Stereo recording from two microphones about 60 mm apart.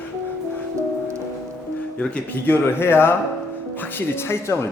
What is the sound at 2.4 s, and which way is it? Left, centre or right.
Speech, left.